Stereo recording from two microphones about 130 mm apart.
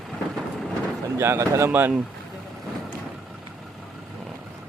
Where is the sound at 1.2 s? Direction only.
20° right (ahead or behind).